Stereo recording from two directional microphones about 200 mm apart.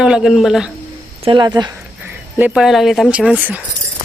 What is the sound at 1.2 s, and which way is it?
Speech, 25° right (ahead or behind).